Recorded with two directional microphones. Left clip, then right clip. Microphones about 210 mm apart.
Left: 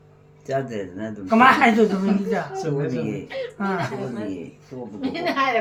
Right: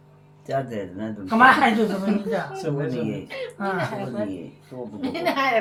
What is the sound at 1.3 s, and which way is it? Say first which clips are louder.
Speech: even; 40° left (ahead or behind).